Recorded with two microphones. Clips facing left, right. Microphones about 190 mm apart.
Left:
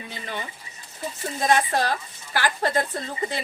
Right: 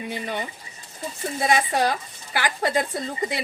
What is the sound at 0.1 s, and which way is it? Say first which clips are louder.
A woman's voice: right 2 dB; 15° right (ahead or behind).